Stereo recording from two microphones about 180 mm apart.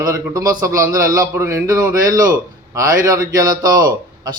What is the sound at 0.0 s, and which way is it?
A man's voice, 20° right (ahead or behind).